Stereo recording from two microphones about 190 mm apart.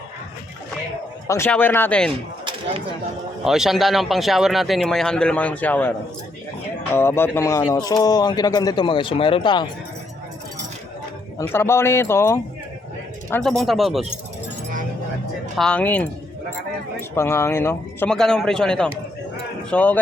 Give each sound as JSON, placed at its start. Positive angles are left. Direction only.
{"t": 1.3, "sound": "a man's voice", "side_deg": 10}
{"t": 2.4, "sound": "a sound", "side_deg": -25}
{"t": 3.4, "sound": "speech", "side_deg": 0}
{"t": 6.9, "sound": "a man's voice", "side_deg": 10}
{"t": 11.3, "sound": "a man's voice", "side_deg": 15}
{"t": 13.3, "sound": "speech", "side_deg": 0}
{"t": 15.5, "sound": "a man's voice", "side_deg": 5}
{"t": 17.2, "sound": "a man's voice", "side_deg": 15}